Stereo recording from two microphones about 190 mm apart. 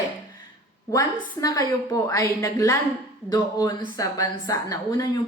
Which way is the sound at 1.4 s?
20° left (ahead or behind).